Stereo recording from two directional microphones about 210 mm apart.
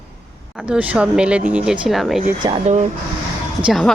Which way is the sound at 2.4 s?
30° right (ahead or behind).